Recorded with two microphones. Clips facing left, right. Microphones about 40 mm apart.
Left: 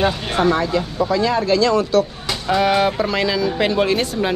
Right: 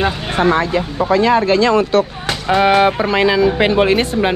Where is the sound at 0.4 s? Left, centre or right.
Right.